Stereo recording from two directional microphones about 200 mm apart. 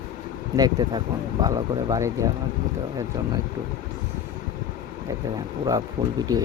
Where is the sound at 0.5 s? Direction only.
20° right (ahead or behind).